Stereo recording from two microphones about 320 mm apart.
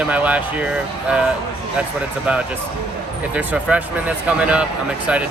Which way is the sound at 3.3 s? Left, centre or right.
Centre.